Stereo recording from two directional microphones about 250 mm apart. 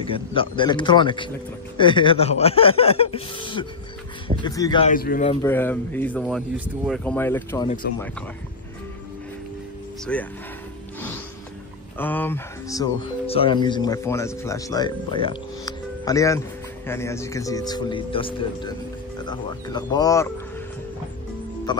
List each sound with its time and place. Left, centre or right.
0.0 s speech: left
4.8 s speech: left
5.4 s speech: centre
7.1 s speech: centre
7.8 s speech: left
10.1 s speech: centre
12.0 s speech: centre
21.7 s speech: centre